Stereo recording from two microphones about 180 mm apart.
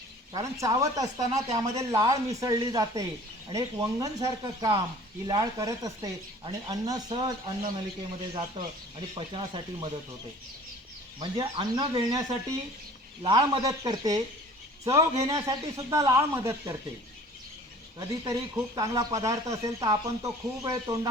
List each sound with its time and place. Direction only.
0.3 s speech: 20° right (ahead or behind)
11.2 s a man's voice: 25° right (ahead or behind)
18.2 s speech: 20° right (ahead or behind)